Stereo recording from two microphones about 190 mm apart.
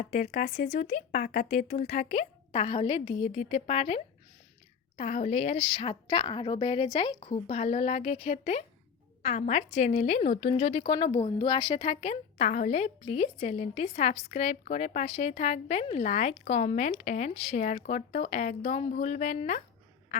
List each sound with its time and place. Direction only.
0.0 s a woman's voice: 40° left (ahead or behind)